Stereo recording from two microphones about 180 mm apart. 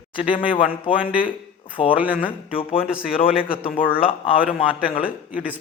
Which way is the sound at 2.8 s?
5° right (ahead or behind).